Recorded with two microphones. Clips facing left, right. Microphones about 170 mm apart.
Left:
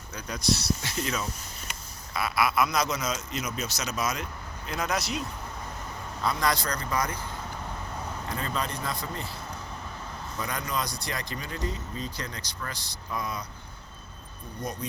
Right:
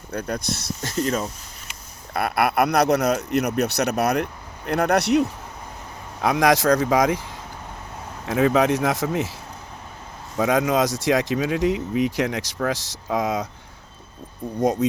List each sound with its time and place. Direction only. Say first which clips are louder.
0.1 s speech: right 3 dB; 55° right (ahead or behind)
2.1 s speech: right 6 dB; 60° right (ahead or behind)
6.2 s speech: right 10 dB; 90° right
14.6 s speech: right 14 dB; 90° right